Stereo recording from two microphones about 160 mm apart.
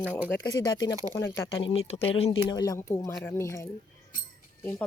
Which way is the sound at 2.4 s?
20° left (ahead or behind).